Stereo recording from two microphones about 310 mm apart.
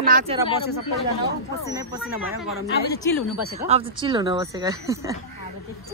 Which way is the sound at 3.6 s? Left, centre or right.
Centre.